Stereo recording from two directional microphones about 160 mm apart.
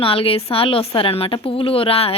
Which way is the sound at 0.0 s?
35° left (ahead or behind).